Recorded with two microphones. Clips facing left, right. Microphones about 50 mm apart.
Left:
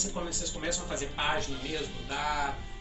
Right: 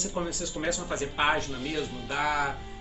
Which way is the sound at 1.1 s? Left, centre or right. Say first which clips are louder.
Right 5 dB; right.